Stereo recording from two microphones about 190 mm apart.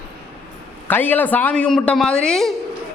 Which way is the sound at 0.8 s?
10° left (ahead or behind).